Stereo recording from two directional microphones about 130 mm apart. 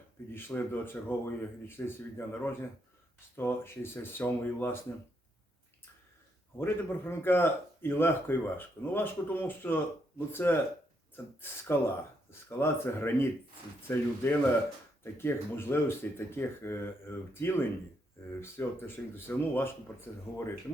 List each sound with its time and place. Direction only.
0.3 s a man's voice: 15° left (ahead or behind)
6.6 s a man's voice: 20° left (ahead or behind)
12.3 s a man's voice: 15° left (ahead or behind)